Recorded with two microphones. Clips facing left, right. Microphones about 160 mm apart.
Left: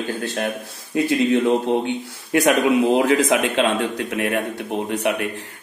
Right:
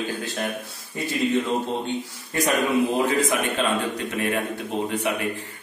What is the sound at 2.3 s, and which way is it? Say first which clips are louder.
A man's voice: left 5 dB; 80° left.